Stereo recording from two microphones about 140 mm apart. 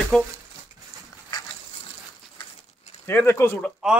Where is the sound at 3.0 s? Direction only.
20° left (ahead or behind).